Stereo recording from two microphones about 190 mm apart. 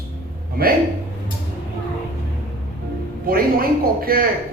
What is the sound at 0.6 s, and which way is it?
Speech, 50° right (ahead or behind).